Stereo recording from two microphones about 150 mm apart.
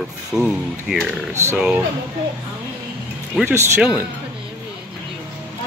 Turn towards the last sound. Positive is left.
turn(degrees=-10)  # may be behind; listen again after turning